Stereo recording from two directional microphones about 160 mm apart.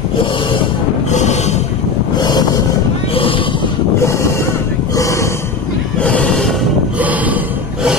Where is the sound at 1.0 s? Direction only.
45° left (ahead or behind).